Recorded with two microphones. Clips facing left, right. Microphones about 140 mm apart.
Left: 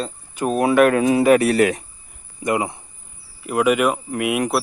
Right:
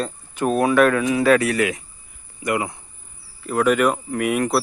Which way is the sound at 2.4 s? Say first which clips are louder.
Left 2 dB; 20° left (ahead or behind).